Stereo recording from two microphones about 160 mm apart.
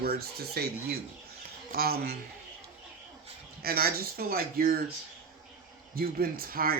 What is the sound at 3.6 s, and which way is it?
Speech, 75° right (ahead or behind).